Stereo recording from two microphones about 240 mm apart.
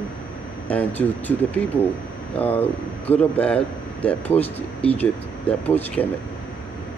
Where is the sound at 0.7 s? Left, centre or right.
Centre.